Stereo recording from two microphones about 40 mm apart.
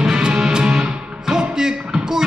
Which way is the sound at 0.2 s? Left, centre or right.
Centre.